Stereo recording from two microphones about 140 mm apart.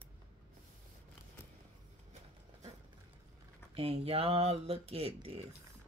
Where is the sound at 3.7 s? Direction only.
45° right (ahead or behind).